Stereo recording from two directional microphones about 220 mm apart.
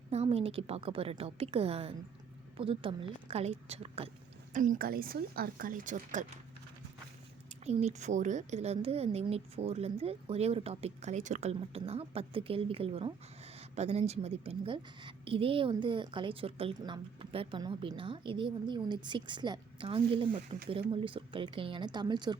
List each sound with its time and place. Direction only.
0.1 s a woman's voice: 30° right (ahead or behind)
4.5 s speech: 35° right (ahead or behind)
7.6 s a woman's voice: 30° right (ahead or behind)